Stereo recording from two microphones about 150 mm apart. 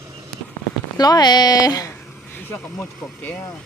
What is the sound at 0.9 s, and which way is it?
Speech, 25° left (ahead or behind).